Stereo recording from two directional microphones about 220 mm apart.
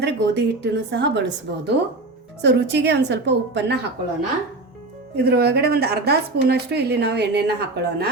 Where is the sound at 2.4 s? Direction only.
50° right (ahead or behind).